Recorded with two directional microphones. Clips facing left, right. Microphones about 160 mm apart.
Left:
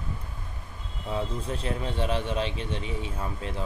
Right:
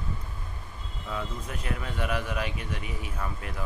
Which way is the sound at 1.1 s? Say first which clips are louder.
Left 4 dB; 30° left (ahead or behind).